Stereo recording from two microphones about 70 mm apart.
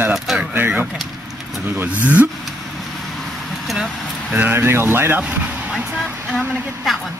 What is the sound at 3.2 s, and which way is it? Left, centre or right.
Vehicle, centre.